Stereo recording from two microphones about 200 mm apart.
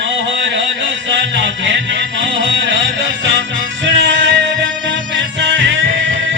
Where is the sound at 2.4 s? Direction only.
65° right (ahead or behind).